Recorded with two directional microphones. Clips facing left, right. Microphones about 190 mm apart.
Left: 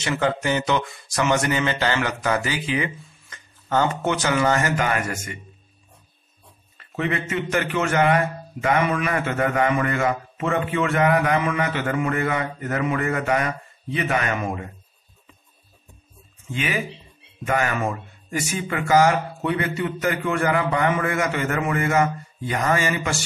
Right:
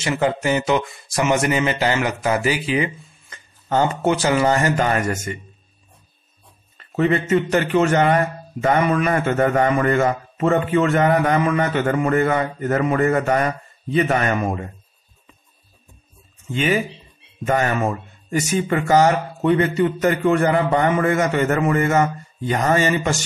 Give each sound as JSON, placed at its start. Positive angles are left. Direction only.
{"t": 0.0, "sound": "speech", "side_deg": -25}
{"t": 7.0, "sound": "a man's voice", "side_deg": -40}
{"t": 17.5, "sound": "a man's voice", "side_deg": -35}